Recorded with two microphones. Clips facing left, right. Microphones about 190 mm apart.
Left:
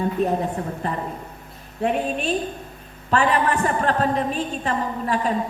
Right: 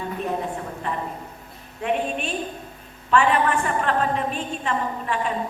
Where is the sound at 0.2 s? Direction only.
40° left (ahead or behind).